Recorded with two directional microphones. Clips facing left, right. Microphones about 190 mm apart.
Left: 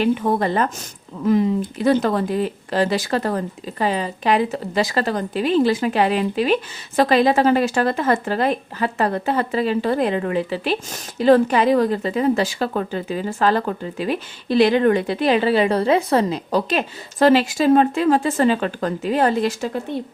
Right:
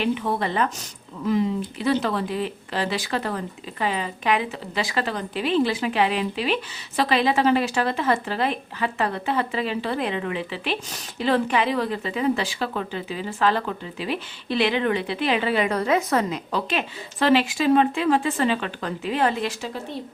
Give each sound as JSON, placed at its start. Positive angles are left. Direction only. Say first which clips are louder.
{"t": 0.0, "sound": "speech", "louder": "left 5 dB", "side_deg": 45}